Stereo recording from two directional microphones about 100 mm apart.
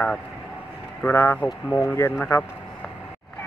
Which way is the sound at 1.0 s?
25° left (ahead or behind).